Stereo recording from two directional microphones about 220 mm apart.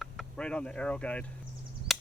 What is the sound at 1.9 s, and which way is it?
Chop, centre (ahead or behind).